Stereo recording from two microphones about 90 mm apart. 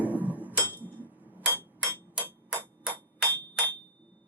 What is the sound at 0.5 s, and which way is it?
Hammer, 20° left (ahead or behind).